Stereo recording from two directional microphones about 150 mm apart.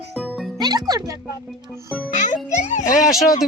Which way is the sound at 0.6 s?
25° right (ahead or behind).